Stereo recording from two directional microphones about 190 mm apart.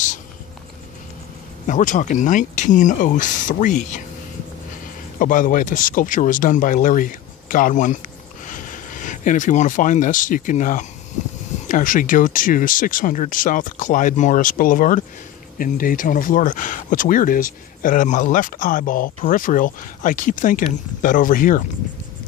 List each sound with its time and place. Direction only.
1.7 s speech: 40° left (ahead or behind)
5.2 s speech: 45° left (ahead or behind)